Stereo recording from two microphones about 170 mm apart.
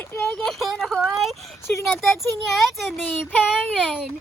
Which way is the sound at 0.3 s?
Centre (ahead or behind).